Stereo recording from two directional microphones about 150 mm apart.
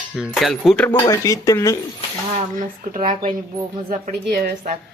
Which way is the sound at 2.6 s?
60° right (ahead or behind).